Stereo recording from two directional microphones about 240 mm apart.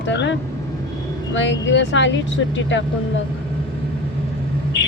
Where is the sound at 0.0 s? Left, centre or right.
Left.